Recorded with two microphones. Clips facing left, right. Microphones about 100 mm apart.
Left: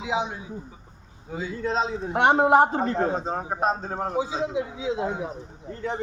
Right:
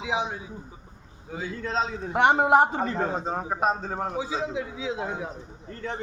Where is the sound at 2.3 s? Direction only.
Centre (ahead or behind).